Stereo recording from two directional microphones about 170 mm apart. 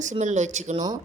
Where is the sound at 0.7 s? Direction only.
25° right (ahead or behind).